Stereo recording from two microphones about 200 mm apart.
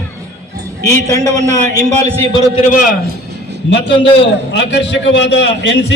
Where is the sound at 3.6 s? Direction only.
65° left (ahead or behind).